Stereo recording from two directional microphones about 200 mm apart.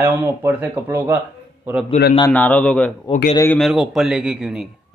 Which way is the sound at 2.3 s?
10° left (ahead or behind).